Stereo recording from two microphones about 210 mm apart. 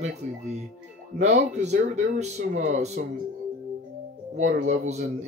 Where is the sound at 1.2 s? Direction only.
35° right (ahead or behind).